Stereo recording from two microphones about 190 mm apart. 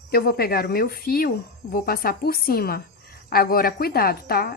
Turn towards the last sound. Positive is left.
turn(degrees=50)  # may be behind; listen again after turning